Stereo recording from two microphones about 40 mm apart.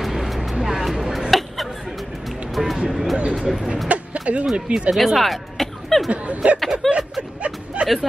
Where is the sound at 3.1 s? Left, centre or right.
Right.